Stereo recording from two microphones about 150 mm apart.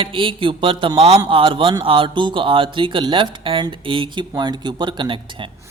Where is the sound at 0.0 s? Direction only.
35° right (ahead or behind).